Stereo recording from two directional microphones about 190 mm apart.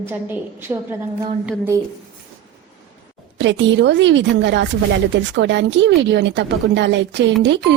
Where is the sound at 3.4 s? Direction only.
70° right (ahead or behind).